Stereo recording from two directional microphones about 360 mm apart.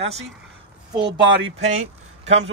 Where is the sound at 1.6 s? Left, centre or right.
Centre.